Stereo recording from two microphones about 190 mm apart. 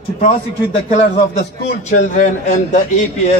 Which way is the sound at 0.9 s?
35° left (ahead or behind).